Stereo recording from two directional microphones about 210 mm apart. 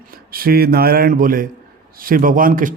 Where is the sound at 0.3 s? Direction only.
45° right (ahead or behind).